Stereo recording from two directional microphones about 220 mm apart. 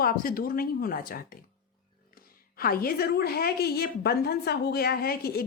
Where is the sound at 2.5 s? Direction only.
40° left (ahead or behind).